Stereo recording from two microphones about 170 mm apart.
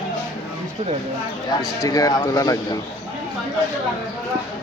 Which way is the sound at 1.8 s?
20° left (ahead or behind).